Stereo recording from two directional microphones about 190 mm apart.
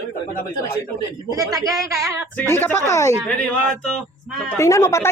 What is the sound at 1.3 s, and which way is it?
Speech, 20° right (ahead or behind).